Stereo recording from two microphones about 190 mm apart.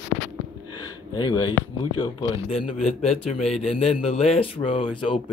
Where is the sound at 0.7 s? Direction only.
25° left (ahead or behind).